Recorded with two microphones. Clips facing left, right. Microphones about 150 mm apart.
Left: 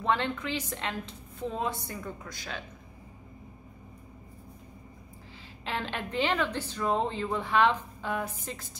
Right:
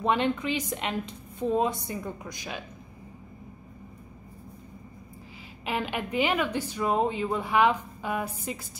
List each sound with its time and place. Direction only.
0.0 s a woman's voice: 15° right (ahead or behind)
5.7 s a woman's voice: 10° right (ahead or behind)